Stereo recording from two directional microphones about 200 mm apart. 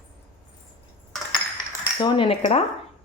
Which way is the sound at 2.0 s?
25° left (ahead or behind).